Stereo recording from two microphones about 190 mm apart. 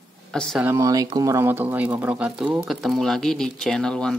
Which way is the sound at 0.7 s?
15° right (ahead or behind).